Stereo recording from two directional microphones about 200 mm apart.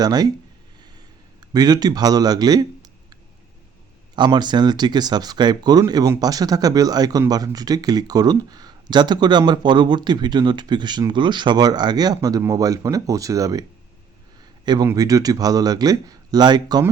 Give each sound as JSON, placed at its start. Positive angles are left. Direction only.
{"t": 0.0, "sound": "speech", "side_deg": -20}
{"t": 1.4, "sound": "speech", "side_deg": -20}